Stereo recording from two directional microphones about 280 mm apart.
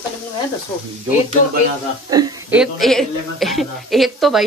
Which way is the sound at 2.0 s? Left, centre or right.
Centre.